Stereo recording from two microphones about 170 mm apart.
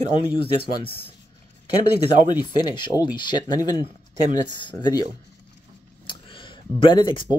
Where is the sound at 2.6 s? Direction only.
25° left (ahead or behind).